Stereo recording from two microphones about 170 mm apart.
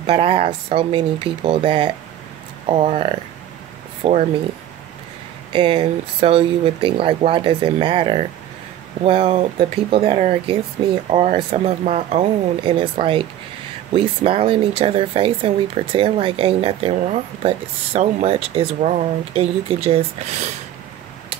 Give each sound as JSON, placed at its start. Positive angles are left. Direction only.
{"t": 0.0, "sound": "speech", "side_deg": -35}
{"t": 5.5, "sound": "speech", "side_deg": -30}
{"t": 13.9, "sound": "speech", "side_deg": -35}